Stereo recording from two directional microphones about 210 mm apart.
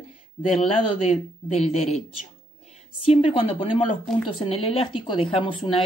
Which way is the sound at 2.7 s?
30° left (ahead or behind).